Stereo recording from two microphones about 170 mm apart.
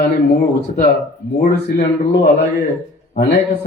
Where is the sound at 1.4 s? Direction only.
65° left (ahead or behind).